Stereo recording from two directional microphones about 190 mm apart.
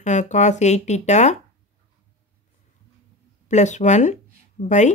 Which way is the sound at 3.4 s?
35° left (ahead or behind).